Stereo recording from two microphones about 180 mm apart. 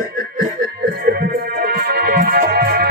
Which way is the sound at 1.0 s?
55° right (ahead or behind).